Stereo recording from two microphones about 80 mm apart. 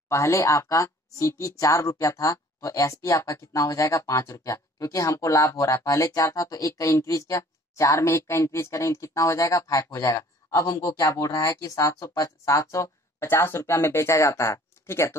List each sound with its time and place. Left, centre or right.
0.1 s speech: left